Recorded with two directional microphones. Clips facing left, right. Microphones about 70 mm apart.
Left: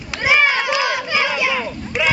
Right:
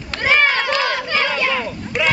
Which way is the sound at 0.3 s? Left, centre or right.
Centre.